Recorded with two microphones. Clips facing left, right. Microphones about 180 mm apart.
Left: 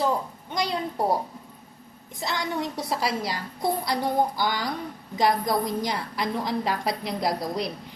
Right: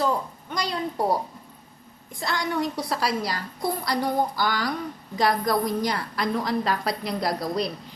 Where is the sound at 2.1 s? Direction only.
20° left (ahead or behind).